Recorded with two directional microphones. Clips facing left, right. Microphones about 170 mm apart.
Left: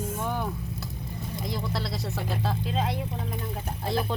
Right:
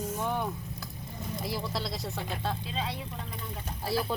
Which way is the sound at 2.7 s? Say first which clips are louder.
Left 6 dB; 50° left (ahead or behind).